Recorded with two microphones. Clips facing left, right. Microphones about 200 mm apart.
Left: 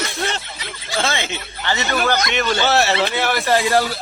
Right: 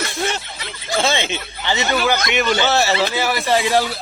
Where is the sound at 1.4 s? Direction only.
Centre (ahead or behind).